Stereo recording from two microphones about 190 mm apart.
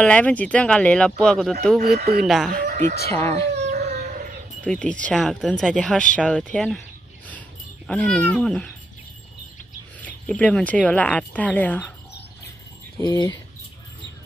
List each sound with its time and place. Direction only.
0.0 s speech: 5° left (ahead or behind)
1.8 s speech: 40° right (ahead or behind)
2.2 s speech: centre (ahead or behind)
2.5 s speech: 50° right (ahead or behind)
3.1 s speech: 15° left (ahead or behind)
3.6 s dog: 35° right (ahead or behind)
4.6 s speech: 5° left (ahead or behind)
9.9 s speech: 10° left (ahead or behind)
12.9 s speech: 20° left (ahead or behind)